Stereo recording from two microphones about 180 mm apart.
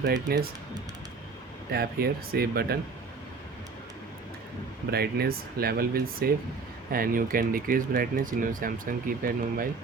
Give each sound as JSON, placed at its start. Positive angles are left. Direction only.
{"t": 0.0, "sound": "speech", "side_deg": -65}
{"t": 1.7, "sound": "speech", "side_deg": -60}
{"t": 4.9, "sound": "speech", "side_deg": -60}